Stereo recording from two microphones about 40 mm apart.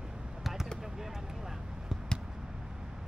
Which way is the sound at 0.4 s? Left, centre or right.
Centre.